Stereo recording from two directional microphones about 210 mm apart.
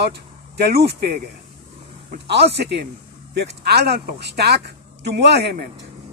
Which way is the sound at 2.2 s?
55° right (ahead or behind).